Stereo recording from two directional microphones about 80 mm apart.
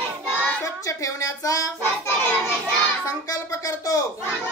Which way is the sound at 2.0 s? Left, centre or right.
Left.